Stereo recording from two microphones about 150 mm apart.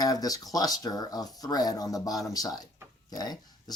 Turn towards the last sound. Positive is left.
turn(degrees=25)  # may be behind; listen again after turning